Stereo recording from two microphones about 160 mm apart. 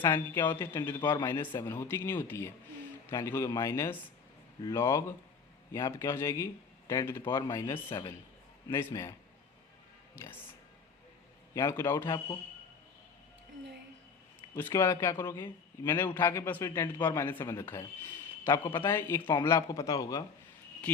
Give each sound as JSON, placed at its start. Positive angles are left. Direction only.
{"t": 0.0, "sound": "a man's voice", "side_deg": 15}
{"t": 10.2, "sound": "speech", "side_deg": 15}
{"t": 11.5, "sound": "speech", "side_deg": 15}
{"t": 14.5, "sound": "a man's voice", "side_deg": 15}